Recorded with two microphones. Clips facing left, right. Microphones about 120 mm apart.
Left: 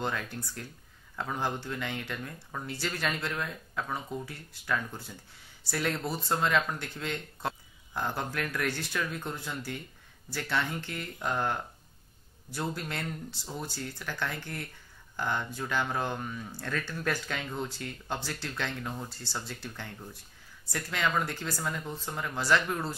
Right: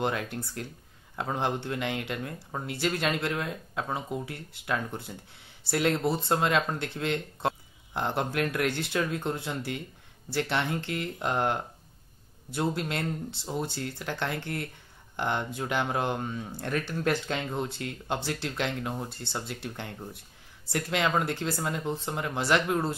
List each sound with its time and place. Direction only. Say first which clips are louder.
0.0 s speech: right 4 dB; 20° right (ahead or behind)